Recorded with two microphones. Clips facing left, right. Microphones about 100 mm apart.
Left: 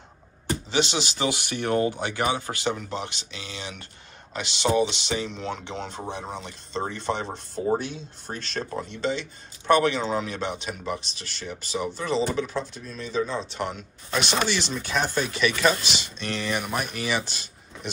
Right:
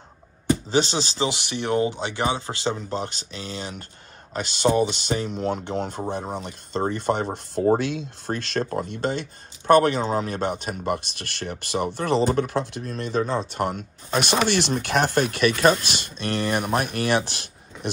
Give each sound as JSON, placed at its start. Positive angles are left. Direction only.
{"t": 0.7, "sound": "speech", "side_deg": -35}
{"t": 3.0, "sound": "speech", "side_deg": -40}
{"t": 7.8, "sound": "speech", "side_deg": -75}
{"t": 8.6, "sound": "speech", "side_deg": -50}
{"t": 10.9, "sound": "speech", "side_deg": -60}